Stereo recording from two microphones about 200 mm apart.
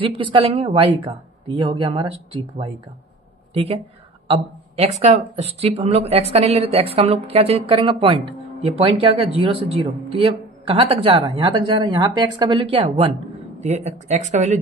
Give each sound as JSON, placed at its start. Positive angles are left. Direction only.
{"t": 0.2, "sound": "speech", "side_deg": -25}